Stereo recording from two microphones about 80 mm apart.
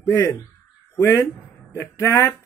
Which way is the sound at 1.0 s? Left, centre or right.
Left.